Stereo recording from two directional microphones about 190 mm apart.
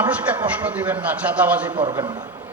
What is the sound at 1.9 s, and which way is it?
Speech, 20° right (ahead or behind).